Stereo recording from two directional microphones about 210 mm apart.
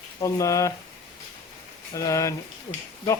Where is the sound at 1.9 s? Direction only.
15° left (ahead or behind).